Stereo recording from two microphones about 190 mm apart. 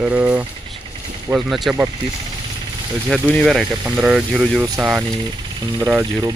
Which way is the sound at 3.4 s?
Centre (ahead or behind).